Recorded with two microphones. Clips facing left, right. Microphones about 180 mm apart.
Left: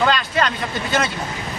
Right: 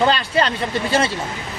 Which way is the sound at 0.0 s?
30° right (ahead or behind).